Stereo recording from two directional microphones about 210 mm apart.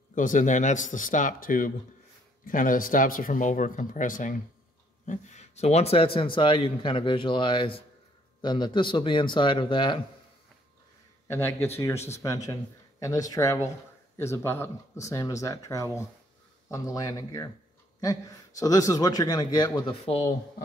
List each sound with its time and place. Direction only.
0.1 s a man's voice: 40° left (ahead or behind); by 9.9 s 20° left (ahead or behind)
11.2 s speech: 10° left (ahead or behind)
18.6 s speech: 15° left (ahead or behind)